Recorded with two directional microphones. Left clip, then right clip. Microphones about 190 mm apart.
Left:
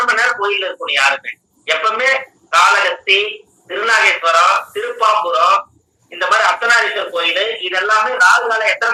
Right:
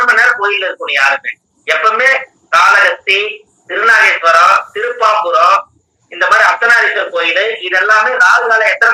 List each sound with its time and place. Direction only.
0.0 s a man's voice: 10° right (ahead or behind)